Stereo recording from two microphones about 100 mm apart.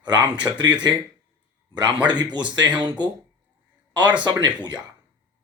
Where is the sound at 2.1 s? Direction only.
45° right (ahead or behind).